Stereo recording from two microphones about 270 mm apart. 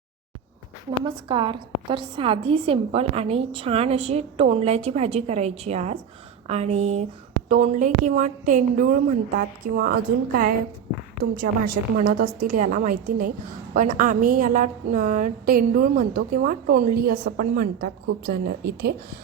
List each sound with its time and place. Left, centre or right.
1.0 s a woman's voice: centre; by 18.9 s right